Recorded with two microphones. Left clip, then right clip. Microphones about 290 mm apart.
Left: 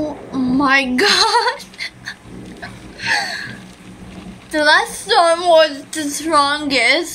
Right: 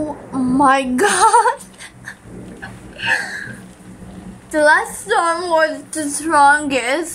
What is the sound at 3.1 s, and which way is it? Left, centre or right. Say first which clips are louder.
Gasp: left 2 dB; centre.